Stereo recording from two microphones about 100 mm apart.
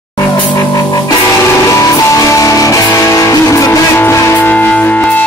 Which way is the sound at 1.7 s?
30° left (ahead or behind).